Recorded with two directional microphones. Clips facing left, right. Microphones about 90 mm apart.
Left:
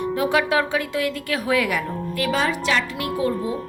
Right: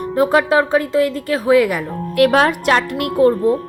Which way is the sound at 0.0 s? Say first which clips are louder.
Right 6 dB; 40° right (ahead or behind).